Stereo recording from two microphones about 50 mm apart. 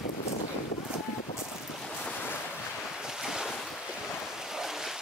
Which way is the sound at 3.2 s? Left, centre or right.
Centre.